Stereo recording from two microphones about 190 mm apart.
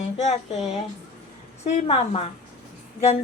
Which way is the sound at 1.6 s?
30° left (ahead or behind).